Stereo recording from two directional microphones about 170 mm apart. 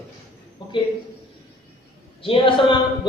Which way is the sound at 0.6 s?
25° left (ahead or behind).